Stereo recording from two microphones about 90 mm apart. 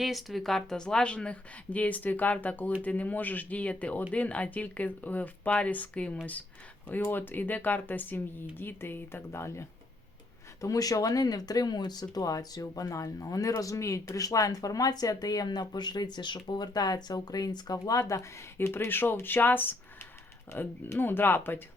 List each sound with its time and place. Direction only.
0.0 s speech: centre (ahead or behind); by 9.6 s 30° left (ahead or behind)
10.6 s speech: 40° left (ahead or behind); by 21.6 s 20° left (ahead or behind)